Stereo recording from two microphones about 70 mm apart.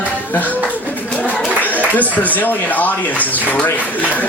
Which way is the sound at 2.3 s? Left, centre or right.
Left.